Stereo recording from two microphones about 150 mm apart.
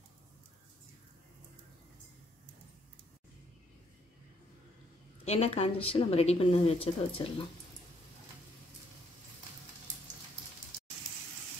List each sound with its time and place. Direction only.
5.2 s a woman's voice: 45° left (ahead or behind)